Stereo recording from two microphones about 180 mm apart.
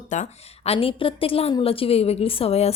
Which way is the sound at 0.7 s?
30° left (ahead or behind).